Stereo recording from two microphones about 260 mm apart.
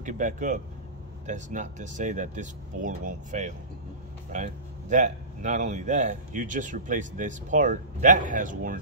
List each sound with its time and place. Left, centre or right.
0.0 s speech: right